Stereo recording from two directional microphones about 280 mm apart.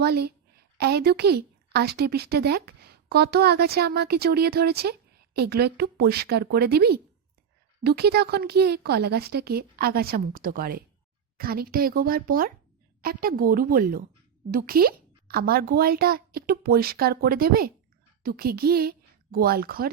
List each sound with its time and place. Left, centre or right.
0.0 s a woman's voice: right